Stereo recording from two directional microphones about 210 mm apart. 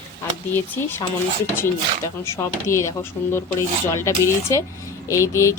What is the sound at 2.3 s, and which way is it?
Speech, 15° left (ahead or behind).